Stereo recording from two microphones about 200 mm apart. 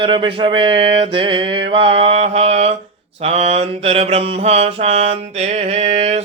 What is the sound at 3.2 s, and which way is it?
Mantra, 30° right (ahead or behind).